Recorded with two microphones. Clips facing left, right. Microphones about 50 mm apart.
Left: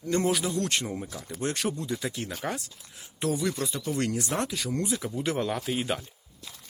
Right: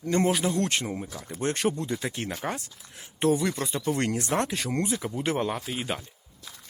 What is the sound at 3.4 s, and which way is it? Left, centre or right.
Speech, right.